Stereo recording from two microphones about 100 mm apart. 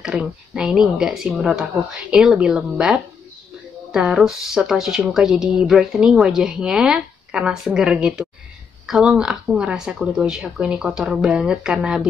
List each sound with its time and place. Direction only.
0.0 s speech: 10° right (ahead or behind)